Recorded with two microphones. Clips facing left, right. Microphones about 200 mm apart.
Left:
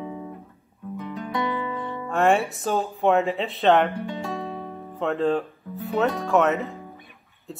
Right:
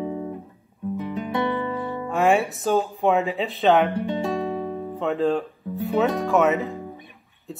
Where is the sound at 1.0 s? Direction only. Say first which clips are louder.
Right 2 dB; 20° right (ahead or behind).